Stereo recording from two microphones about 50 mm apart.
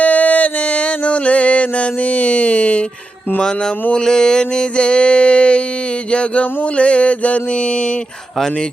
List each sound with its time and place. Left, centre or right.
0.0 s music: left
3.9 s mantra: centre